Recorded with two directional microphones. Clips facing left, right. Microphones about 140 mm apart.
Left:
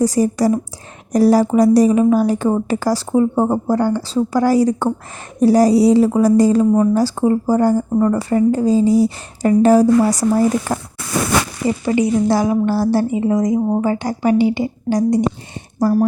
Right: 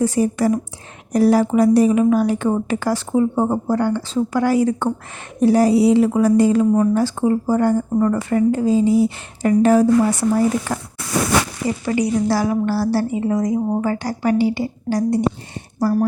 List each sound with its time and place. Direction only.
0.0 s a woman's voice: 40° left (ahead or behind)
11.6 s a woman's voice: 25° left (ahead or behind)